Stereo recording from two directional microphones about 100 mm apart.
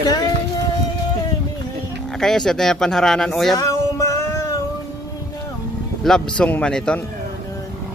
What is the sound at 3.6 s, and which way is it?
Music, 30° left (ahead or behind).